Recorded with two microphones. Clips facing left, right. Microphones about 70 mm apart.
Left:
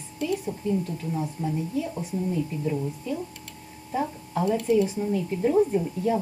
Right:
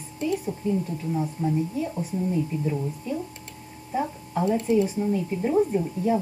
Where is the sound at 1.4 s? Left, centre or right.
Centre.